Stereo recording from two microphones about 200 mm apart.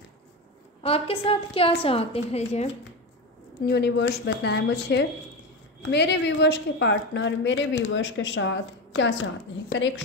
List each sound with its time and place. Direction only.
0.8 s a woman's voice: 30° left (ahead or behind)
3.6 s a woman's voice: 55° left (ahead or behind)